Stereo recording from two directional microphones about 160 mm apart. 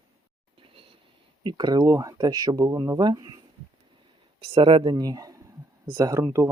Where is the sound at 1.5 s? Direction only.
25° right (ahead or behind).